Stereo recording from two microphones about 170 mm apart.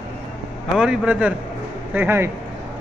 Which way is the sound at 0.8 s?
5° right (ahead or behind).